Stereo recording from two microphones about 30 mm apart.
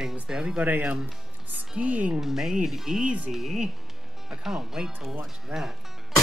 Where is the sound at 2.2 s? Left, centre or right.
Centre.